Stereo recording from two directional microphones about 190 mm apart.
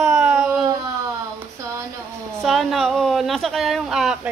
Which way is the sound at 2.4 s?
Centre (ahead or behind).